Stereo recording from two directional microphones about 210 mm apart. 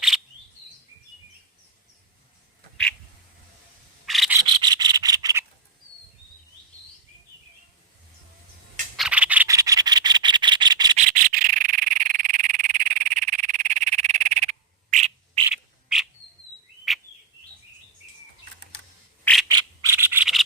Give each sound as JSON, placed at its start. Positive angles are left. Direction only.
{"t": 4.0, "sound": "scrape", "side_deg": 0}
{"t": 4.6, "sound": "rub", "side_deg": -20}
{"t": 9.0, "sound": "rub", "side_deg": -5}
{"t": 10.9, "sound": "frog", "side_deg": -40}
{"t": 15.4, "sound": "frog", "side_deg": 0}
{"t": 16.9, "sound": "bird", "side_deg": 0}
{"t": 19.2, "sound": "bird", "side_deg": 5}
{"t": 19.5, "sound": "scratch", "side_deg": -20}